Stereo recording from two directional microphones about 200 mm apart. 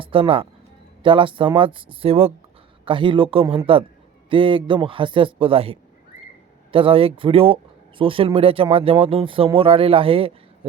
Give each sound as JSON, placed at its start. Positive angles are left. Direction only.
{"t": 0.0, "sound": "speech", "side_deg": -25}